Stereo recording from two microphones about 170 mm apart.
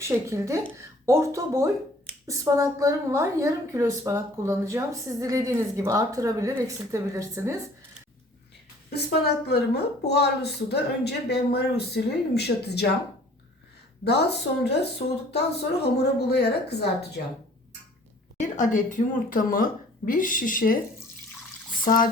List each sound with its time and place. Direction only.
0.0 s a woman's voice: 15° right (ahead or behind)
8.9 s a woman's voice: 75° left (ahead or behind)
14.0 s a woman's voice: 75° left (ahead or behind)
18.3 s a woman's voice: 45° left (ahead or behind)
21.8 s a woman's voice: 50° left (ahead or behind)